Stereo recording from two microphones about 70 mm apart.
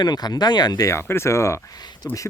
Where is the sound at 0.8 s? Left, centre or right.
Left.